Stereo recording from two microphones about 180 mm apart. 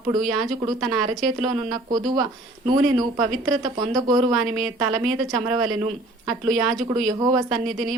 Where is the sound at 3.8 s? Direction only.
20° right (ahead or behind).